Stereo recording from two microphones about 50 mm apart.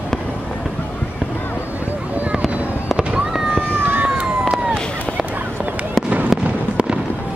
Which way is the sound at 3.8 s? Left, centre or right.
Right.